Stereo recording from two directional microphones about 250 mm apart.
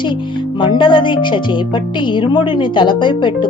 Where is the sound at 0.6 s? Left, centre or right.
Centre.